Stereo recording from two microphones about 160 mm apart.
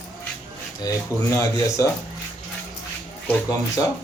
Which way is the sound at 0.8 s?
20° left (ahead or behind).